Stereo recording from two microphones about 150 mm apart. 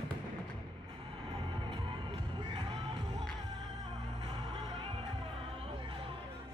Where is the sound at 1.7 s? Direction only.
35° right (ahead or behind).